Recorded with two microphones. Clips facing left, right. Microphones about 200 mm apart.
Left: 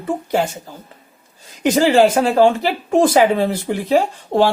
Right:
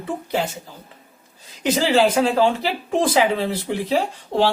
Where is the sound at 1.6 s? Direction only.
50° left (ahead or behind).